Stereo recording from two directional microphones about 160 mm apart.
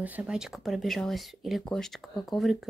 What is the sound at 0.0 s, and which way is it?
Speech, 10° right (ahead or behind).